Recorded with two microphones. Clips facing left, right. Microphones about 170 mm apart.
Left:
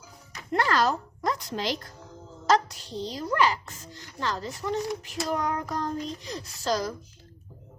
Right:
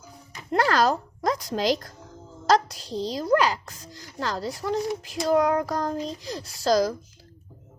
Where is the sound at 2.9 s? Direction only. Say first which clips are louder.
Right 7 dB; 35° right (ahead or behind).